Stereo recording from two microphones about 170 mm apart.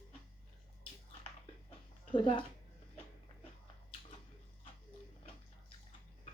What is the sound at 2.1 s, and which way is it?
Speech, 30° left (ahead or behind).